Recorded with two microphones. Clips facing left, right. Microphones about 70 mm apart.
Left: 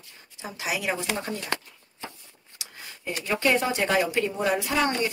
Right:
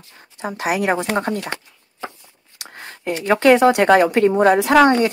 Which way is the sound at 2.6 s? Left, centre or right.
Right.